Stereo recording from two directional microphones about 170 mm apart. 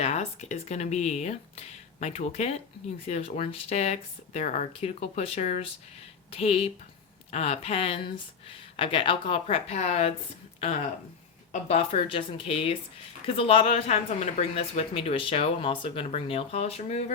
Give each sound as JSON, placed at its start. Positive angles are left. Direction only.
{"t": 0.0, "sound": "a woman's voice", "side_deg": 40}
{"t": 11.7, "sound": "a woman's voice", "side_deg": 35}